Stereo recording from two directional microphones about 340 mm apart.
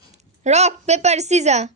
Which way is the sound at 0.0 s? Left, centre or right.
Centre.